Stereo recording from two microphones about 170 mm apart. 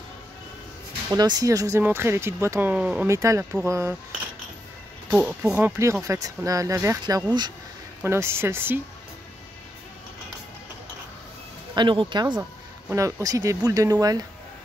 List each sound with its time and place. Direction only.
1.1 s speech: 25° right (ahead or behind); by 3.1 s 5° right (ahead or behind)
3.1 s speech: 15° right (ahead or behind)
5.1 s speech: 10° right (ahead or behind)
11.7 s speech: 30° right (ahead or behind)
12.4 s speech: 15° right (ahead or behind)